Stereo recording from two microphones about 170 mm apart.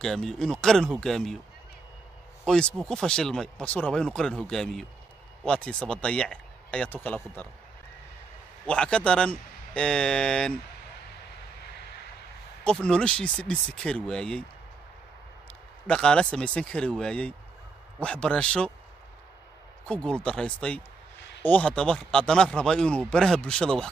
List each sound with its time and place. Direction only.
0.0 s speech: centre (ahead or behind)
2.4 s speech: 5° left (ahead or behind)
8.6 s speech: 5° left (ahead or behind)
12.6 s speech: 5° left (ahead or behind)
15.9 s speech: 5° left (ahead or behind)
20.1 s speech: 5° left (ahead or behind)